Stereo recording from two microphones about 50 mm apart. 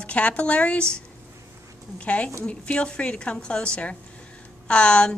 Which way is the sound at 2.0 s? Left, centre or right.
Left.